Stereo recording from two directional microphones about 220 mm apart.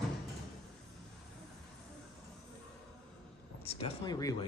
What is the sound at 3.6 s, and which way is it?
Speech, 25° left (ahead or behind).